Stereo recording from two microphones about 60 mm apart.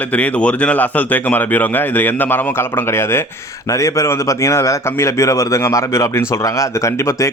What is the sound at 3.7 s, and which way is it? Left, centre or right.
Speech, left.